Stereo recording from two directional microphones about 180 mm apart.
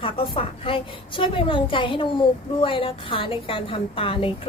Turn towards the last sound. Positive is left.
turn(degrees=30)  # may be behind; listen again after turning